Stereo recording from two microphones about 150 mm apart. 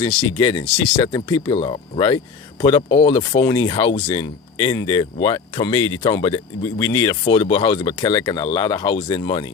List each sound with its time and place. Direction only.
0.0 s speech: 30° left (ahead or behind)